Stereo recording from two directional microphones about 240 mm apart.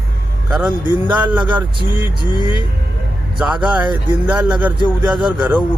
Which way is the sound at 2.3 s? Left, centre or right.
Centre.